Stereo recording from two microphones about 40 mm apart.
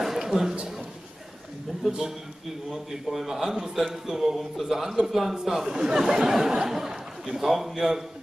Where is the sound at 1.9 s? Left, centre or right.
Centre.